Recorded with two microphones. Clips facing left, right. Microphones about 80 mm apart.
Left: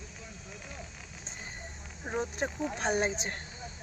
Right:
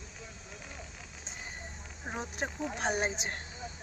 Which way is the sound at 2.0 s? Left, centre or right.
Centre.